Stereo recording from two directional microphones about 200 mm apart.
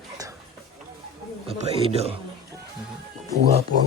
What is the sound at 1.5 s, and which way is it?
Speech, 30° right (ahead or behind).